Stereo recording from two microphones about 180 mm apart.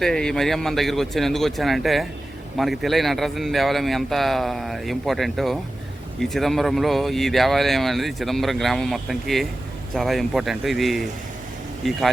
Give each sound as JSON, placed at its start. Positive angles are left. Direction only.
{"t": 0.0, "sound": "speech", "side_deg": 5}